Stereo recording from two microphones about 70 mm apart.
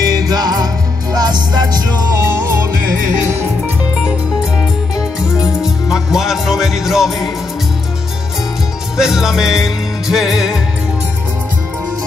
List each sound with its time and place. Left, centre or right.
0.0 s music: right
1.1 s music: right
4.6 s music: centre
8.9 s music: centre